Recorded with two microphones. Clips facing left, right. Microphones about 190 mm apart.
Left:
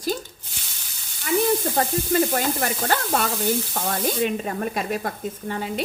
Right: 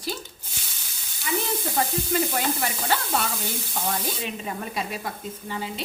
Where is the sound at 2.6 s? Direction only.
50° left (ahead or behind).